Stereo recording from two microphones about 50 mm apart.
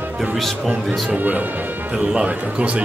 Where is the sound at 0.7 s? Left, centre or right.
Right.